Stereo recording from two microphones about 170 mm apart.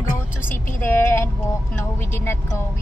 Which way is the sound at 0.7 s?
15° left (ahead or behind).